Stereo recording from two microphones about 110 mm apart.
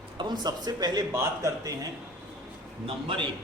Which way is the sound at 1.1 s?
25° right (ahead or behind).